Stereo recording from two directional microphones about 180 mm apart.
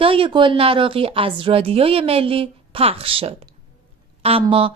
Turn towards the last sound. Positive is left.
turn(degrees=-30)  # may be behind; listen again after turning